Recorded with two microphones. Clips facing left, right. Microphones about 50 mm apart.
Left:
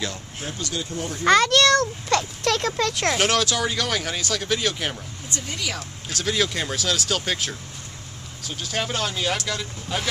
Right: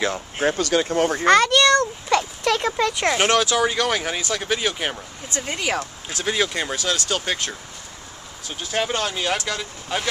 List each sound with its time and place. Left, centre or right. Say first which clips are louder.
0.5 s speech: right 10 dB; right
1.2 s speech: even; centre
5.4 s speech: right 7 dB; right
6.0 s speech: even; centre